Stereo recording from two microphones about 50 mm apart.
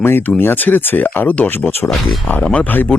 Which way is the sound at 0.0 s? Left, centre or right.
Left.